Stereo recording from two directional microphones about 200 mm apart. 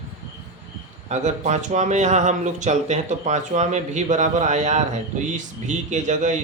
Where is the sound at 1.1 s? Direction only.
35° right (ahead or behind).